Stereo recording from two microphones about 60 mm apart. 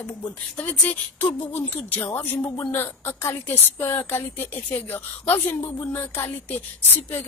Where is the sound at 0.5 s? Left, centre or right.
Left.